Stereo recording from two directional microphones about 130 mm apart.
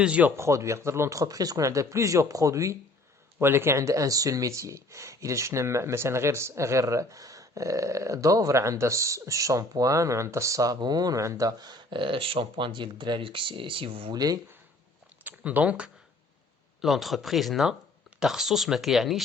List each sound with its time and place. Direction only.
0.0 s speech: 10° right (ahead or behind); by 14.1 s 45° right (ahead or behind)
14.1 s speech: 30° right (ahead or behind)
15.2 s speech: 15° right (ahead or behind)